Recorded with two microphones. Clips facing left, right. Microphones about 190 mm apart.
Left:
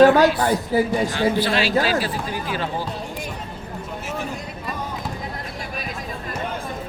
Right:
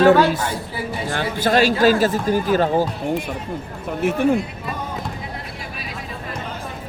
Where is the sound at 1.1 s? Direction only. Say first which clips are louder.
Right 1 dB; 45° right (ahead or behind).